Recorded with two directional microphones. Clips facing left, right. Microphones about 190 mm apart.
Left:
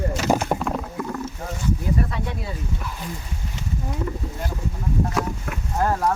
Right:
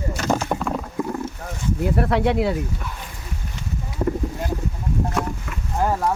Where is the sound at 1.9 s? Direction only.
70° right (ahead or behind).